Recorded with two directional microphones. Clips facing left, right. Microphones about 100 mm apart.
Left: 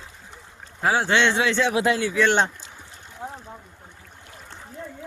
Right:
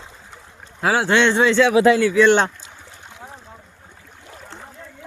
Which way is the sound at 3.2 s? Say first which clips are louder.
Left 5 dB; 15° left (ahead or behind).